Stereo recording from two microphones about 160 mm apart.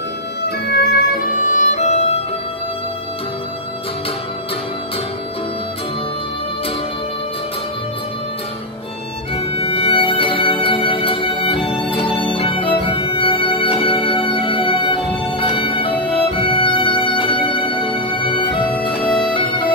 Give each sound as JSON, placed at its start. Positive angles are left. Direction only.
{"t": 0.4, "sound": "music", "side_deg": 85}
{"t": 9.3, "sound": "music", "side_deg": 35}